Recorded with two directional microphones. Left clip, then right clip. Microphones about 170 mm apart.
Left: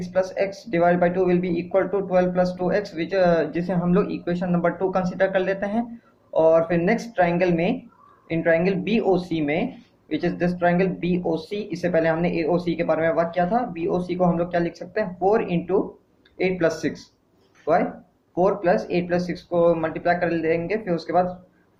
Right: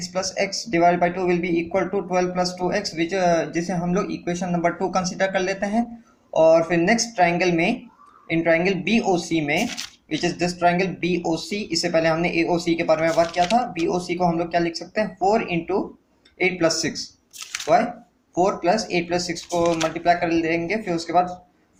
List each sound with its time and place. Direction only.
0.1 s speech: 25° right (ahead or behind)